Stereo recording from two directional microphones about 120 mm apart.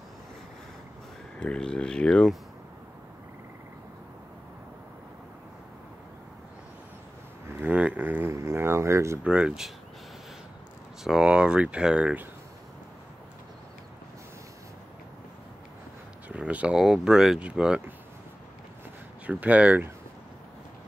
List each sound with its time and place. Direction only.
1.4 s speech: 10° left (ahead or behind)
7.4 s a sound: 15° right (ahead or behind)
9.2 s speech: 10° right (ahead or behind)
11.1 s speech: 5° right (ahead or behind)
16.3 s speech: 10° right (ahead or behind)
19.2 s speech: 10° right (ahead or behind)